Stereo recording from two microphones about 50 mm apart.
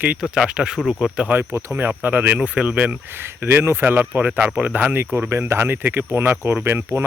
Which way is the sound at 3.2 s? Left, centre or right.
Right.